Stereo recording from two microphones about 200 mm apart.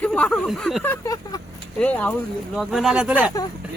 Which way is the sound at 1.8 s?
5° left (ahead or behind).